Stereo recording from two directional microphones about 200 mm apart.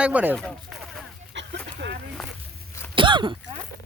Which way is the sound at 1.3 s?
60° right (ahead or behind).